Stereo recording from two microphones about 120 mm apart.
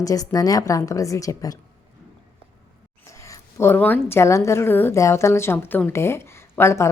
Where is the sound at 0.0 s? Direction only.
30° left (ahead or behind).